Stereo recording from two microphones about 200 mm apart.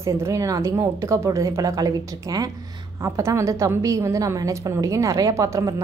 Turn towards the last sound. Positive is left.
turn(degrees=-15)  # may be behind; listen again after turning